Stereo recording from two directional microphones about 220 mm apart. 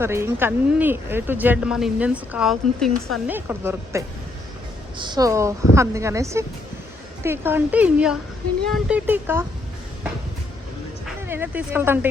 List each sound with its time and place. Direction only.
0.0 s speech: 10° right (ahead or behind)
11.0 s speech: 10° right (ahead or behind)